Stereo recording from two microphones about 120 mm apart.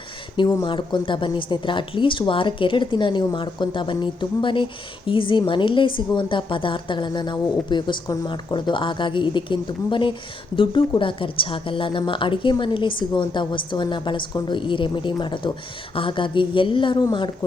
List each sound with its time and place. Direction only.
0.3 s a woman's voice: 40° left (ahead or behind)